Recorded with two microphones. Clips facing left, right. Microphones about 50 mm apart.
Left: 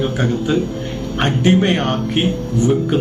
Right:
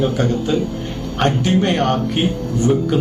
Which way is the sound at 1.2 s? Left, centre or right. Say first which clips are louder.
Left 2 dB; left.